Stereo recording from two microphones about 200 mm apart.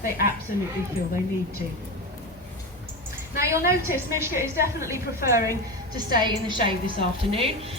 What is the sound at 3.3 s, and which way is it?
A woman's voice, 15° right (ahead or behind).